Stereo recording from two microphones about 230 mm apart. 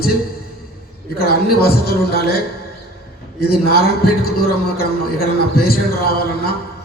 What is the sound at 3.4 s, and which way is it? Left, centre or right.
A man's voice, left.